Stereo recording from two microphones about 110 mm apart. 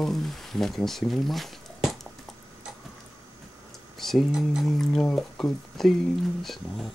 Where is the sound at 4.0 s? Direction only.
Centre (ahead or behind).